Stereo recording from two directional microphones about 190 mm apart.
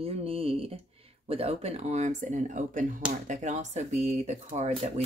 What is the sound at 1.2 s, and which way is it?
Speech, 30° right (ahead or behind).